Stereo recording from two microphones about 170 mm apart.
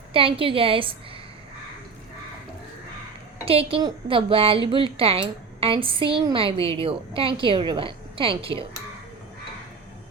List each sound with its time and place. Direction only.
0.1 s a woman's voice: 30° right (ahead or behind)
3.4 s a woman's voice: 35° right (ahead or behind)